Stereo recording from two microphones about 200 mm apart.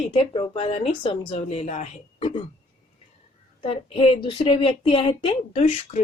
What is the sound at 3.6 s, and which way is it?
A woman's voice, 30° left (ahead or behind).